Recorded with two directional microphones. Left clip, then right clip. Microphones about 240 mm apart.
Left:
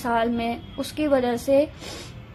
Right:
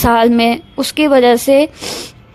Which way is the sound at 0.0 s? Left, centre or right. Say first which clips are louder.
Right 13 dB; right.